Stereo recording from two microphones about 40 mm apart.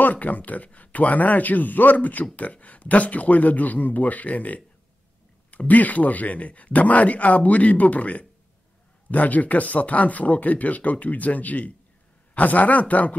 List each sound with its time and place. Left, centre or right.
0.0 s a man's voice: left
5.7 s speech: left